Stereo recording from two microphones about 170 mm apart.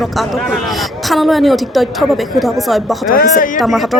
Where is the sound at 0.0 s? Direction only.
Centre (ahead or behind).